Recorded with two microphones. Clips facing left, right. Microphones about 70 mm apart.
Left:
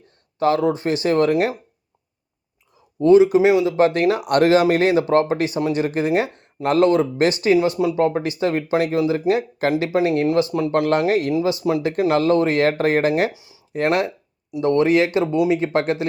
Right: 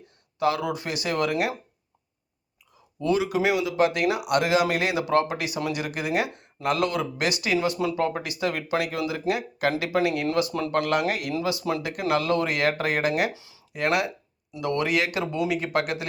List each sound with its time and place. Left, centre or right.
0.3 s speech: left
3.0 s speech: left
13.3 s a sound: left
13.8 s speech: left